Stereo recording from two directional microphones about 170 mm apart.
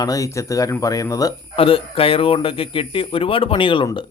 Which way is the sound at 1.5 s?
35° left (ahead or behind).